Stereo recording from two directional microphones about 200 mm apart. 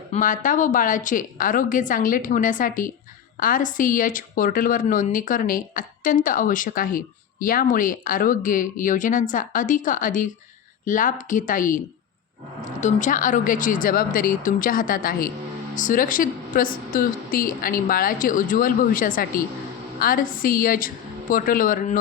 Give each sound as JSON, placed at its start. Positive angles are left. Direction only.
{"t": 0.1, "sound": "a woman's voice", "side_deg": 40}
{"t": 12.8, "sound": "a woman's voice", "side_deg": 40}